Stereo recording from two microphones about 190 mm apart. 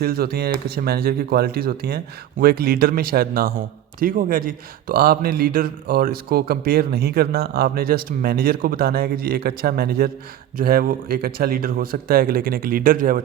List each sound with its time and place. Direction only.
0.0 s a man's voice: 55° right (ahead or behind)